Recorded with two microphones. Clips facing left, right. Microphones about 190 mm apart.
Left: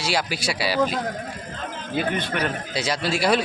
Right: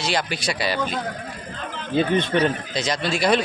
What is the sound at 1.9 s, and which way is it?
Speech, 25° right (ahead or behind).